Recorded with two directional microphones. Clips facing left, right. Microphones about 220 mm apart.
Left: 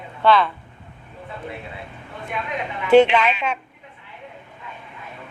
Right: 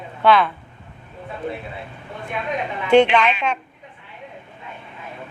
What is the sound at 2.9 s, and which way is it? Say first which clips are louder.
Speech: left 1 dB; 5° left (ahead or behind).